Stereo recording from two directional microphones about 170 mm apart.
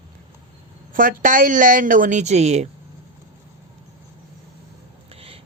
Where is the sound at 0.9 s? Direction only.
50° right (ahead or behind).